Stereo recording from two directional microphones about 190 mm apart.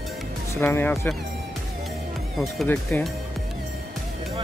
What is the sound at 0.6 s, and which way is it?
Speech, 10° left (ahead or behind).